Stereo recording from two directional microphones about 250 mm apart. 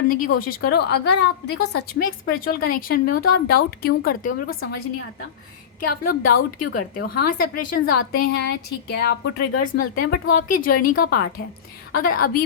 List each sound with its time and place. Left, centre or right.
0.1 s a woman's voice: left
5.9 s a woman's voice: left